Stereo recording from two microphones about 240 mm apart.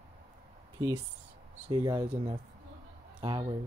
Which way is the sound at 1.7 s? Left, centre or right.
Centre.